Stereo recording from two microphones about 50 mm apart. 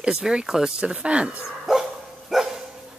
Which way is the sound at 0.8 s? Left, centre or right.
Right.